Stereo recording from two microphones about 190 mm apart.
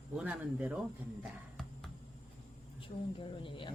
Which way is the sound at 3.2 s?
25° left (ahead or behind).